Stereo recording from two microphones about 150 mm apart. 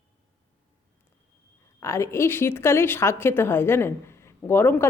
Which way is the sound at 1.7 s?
20° left (ahead or behind).